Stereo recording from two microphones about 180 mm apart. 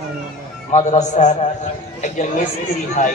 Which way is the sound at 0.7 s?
40° left (ahead or behind).